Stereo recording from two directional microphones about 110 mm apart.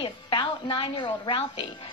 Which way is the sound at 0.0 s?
45° left (ahead or behind).